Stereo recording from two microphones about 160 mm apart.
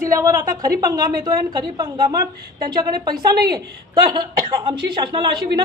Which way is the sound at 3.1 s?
70° right (ahead or behind).